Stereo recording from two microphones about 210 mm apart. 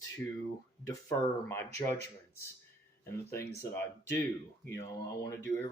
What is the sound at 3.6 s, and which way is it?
Speech, 10° left (ahead or behind).